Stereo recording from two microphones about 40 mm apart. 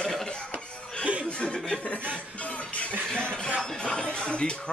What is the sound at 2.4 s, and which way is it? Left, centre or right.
Music, left.